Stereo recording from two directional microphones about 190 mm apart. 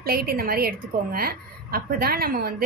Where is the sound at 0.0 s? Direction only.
55° right (ahead or behind).